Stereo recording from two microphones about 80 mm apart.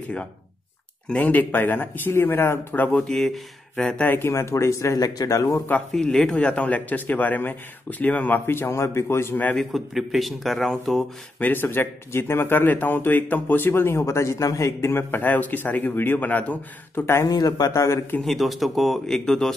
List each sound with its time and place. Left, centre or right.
1.0 s speech: centre
3.1 s speech: centre
4.0 s speech: left
4.3 s speech: left
4.9 s speech: left
5.9 s speech: centre; by 9.4 s left
9.4 s speech: centre
9.7 s speech: centre
11.3 s speech: left
17.2 s speech: left
18.2 s speech: centre